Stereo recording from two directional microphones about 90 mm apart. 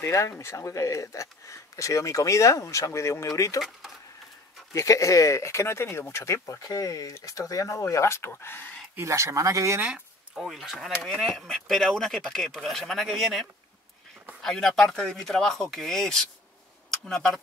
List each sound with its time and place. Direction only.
0.0 s speech: 30° left (ahead or behind)
4.7 s speech: 35° left (ahead or behind)
8.9 s speech: 35° right (ahead or behind)
9.8 s a sound: 10° right (ahead or behind)
10.4 s speech: 5° right (ahead or behind)